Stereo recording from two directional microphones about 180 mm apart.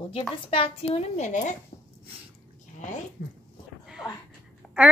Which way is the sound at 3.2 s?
60° left (ahead or behind).